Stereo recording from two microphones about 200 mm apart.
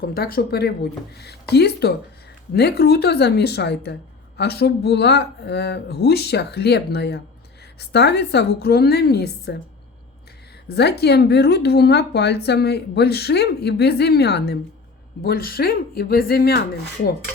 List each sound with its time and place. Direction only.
0.0 s speech: 50° left (ahead or behind)
10.7 s speech: 55° left (ahead or behind)